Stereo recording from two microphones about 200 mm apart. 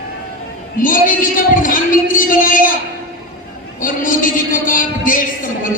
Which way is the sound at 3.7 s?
40° left (ahead or behind).